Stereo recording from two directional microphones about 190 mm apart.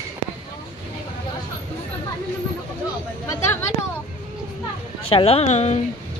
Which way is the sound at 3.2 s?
15° left (ahead or behind).